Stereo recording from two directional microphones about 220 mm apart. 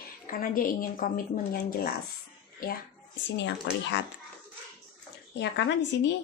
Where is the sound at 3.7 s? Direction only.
55° left (ahead or behind).